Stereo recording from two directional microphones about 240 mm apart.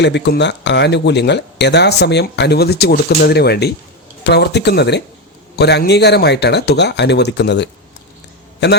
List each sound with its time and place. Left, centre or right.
0.0 s speech: left